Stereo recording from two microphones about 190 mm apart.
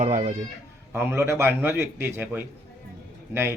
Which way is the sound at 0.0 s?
40° right (ahead or behind).